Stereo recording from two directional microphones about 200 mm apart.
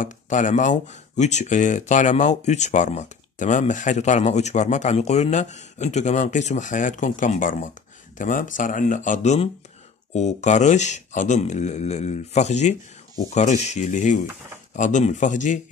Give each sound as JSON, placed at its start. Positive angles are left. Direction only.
{"t": 0.0, "sound": "speech", "side_deg": 40}